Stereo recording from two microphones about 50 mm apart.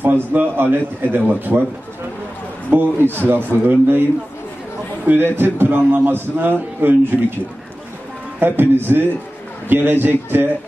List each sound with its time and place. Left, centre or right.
0.0 s a man's voice: right
2.7 s a man's voice: right
5.0 s a man's voice: right
8.4 s a man's voice: right